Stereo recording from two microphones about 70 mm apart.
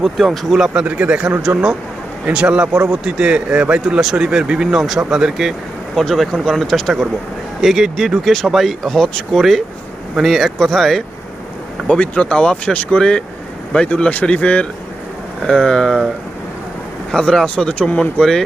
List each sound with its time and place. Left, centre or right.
0.0 s speech: centre
0.8 s a man's voice: centre
11.9 s speech: centre
17.1 s speech: centre